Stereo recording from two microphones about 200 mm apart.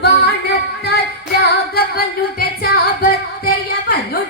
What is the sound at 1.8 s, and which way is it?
Singing, 50° left (ahead or behind).